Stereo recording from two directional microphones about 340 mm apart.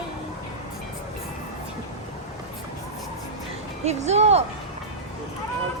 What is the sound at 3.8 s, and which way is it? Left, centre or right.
Speech, centre.